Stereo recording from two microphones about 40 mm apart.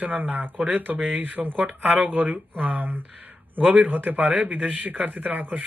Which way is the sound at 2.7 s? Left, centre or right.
Right.